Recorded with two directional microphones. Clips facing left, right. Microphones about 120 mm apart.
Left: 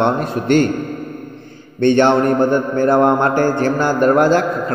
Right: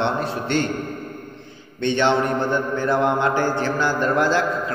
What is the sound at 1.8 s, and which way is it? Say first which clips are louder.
Mantra: left 7 dB; 50° left (ahead or behind).